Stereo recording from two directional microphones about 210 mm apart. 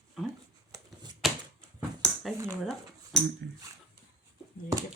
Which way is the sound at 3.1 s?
Centre (ahead or behind).